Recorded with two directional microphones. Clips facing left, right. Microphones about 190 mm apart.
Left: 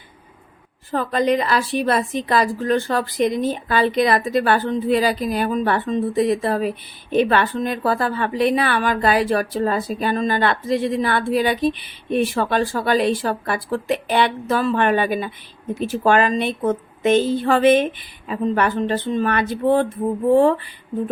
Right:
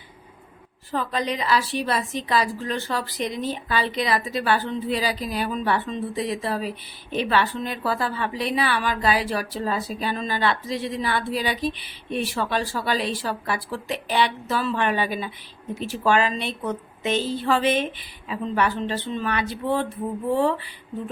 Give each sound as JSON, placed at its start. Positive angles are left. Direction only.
{"t": 0.9, "sound": "a woman's voice", "side_deg": 50}